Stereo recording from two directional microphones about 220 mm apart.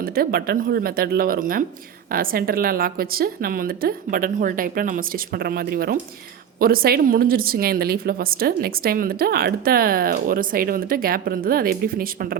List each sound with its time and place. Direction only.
0.0 s a woman's voice: 40° right (ahead or behind)